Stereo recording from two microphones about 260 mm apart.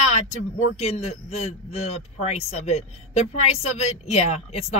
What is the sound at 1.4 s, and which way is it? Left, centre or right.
A man's voice, left.